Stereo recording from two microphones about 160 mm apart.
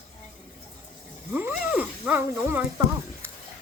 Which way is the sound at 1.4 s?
10° right (ahead or behind).